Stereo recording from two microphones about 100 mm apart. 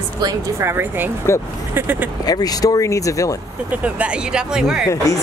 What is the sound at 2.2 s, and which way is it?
Speech, 40° left (ahead or behind).